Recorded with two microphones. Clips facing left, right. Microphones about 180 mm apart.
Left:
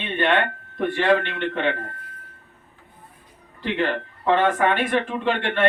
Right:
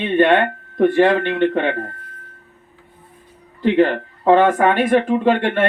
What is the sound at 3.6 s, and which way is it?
Speech, 40° right (ahead or behind).